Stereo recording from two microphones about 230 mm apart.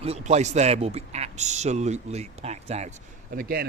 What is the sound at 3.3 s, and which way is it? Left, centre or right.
Speech, right.